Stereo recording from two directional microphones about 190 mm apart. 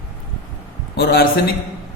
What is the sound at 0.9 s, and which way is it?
Speech, 60° left (ahead or behind).